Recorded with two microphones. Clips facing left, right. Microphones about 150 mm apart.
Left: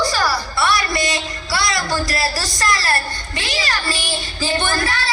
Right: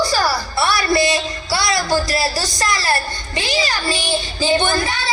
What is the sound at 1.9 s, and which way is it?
Speech, 25° right (ahead or behind).